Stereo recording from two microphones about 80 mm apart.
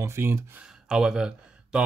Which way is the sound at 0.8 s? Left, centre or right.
Centre.